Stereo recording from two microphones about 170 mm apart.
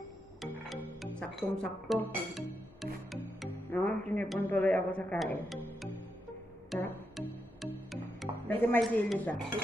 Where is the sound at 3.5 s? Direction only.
10° left (ahead or behind).